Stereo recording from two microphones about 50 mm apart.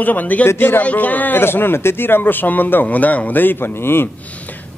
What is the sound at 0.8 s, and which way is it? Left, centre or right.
Speech, left.